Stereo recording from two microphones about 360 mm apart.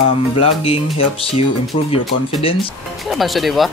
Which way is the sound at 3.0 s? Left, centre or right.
Centre.